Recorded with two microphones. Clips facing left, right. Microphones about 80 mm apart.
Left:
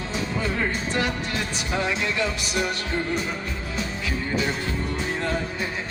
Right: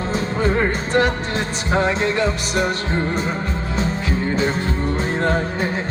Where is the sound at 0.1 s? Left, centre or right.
Right.